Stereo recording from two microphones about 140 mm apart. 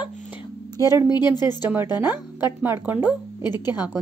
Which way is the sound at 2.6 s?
15° right (ahead or behind).